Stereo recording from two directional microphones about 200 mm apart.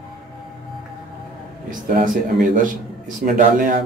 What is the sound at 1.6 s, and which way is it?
Speech, 45° right (ahead or behind).